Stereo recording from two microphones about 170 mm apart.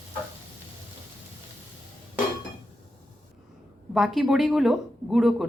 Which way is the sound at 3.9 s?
Centre (ahead or behind).